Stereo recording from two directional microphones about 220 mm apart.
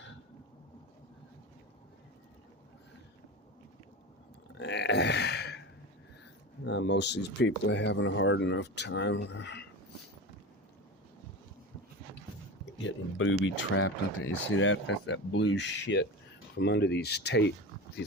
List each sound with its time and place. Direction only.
4.5 s a sound: 50° left (ahead or behind)
6.7 s speech: 55° left (ahead or behind)
12.8 s speech: 60° left (ahead or behind)